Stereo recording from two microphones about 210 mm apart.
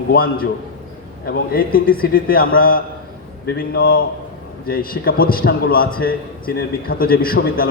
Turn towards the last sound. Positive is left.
turn(degrees=45)  # may be behind; listen again after turning